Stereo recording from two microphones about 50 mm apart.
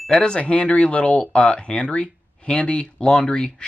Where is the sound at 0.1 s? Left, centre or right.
Centre.